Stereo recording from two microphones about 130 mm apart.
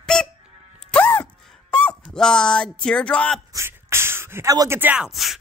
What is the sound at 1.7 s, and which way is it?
Speech, 10° left (ahead or behind).